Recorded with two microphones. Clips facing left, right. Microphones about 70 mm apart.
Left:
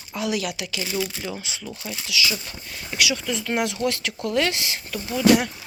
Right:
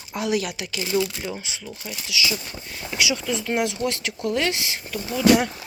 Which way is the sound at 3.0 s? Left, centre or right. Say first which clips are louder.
Even; right.